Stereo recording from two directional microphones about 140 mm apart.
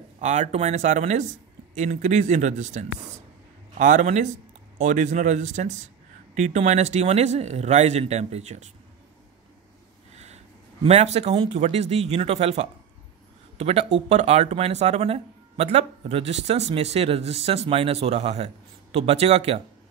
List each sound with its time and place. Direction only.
0.2 s speech: 55° right (ahead or behind)
10.1 s speech: 50° right (ahead or behind)